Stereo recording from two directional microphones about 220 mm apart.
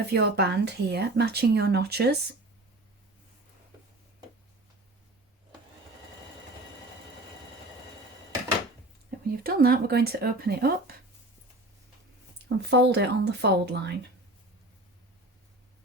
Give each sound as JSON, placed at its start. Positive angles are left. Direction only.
{"t": 0.1, "sound": "a woman's voice", "side_deg": -50}
{"t": 9.0, "sound": "a woman's voice", "side_deg": -45}
{"t": 12.5, "sound": "a woman's voice", "side_deg": -50}